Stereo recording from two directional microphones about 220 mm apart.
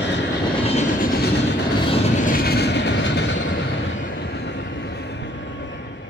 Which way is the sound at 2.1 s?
40° left (ahead or behind).